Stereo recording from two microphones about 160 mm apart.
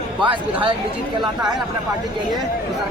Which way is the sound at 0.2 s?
30° right (ahead or behind).